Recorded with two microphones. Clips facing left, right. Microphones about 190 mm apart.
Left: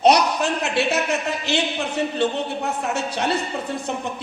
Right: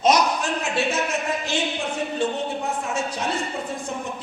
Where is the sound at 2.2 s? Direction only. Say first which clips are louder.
Even; 65° left (ahead or behind).